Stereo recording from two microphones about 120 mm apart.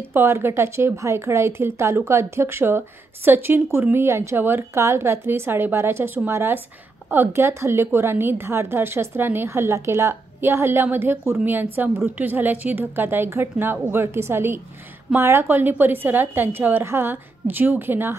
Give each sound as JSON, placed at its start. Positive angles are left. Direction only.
{"t": 0.1, "sound": "a woman's voice", "side_deg": -20}